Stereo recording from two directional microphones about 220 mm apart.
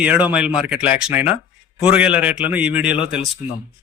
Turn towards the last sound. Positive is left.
turn(degrees=-5)  # may be behind; listen again after turning